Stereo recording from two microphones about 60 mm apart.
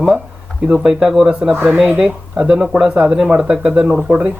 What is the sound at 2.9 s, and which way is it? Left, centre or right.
A man's voice, centre.